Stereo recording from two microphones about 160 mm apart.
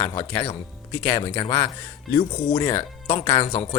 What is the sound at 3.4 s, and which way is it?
Speech, 35° left (ahead or behind).